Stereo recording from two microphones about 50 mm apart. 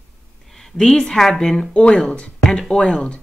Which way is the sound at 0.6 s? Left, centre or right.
Centre.